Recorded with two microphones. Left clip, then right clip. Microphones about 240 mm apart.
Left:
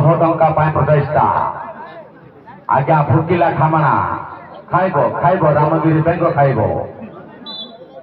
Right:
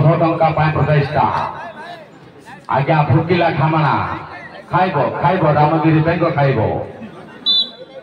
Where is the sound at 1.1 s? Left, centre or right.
Right.